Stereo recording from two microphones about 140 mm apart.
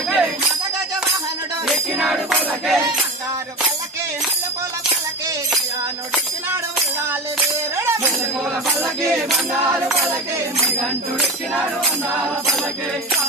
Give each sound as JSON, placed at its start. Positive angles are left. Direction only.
{"t": 0.1, "sound": "music", "side_deg": -5}
{"t": 1.7, "sound": "music", "side_deg": 0}
{"t": 7.7, "sound": "music", "side_deg": -20}
{"t": 10.6, "sound": "music", "side_deg": 0}